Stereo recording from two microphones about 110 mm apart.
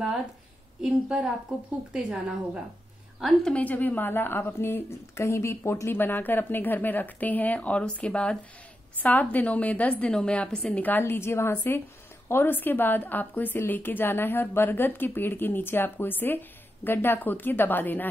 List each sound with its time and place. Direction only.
0.7 s a woman's voice: 5° right (ahead or behind)
3.5 s a woman's voice: 15° left (ahead or behind)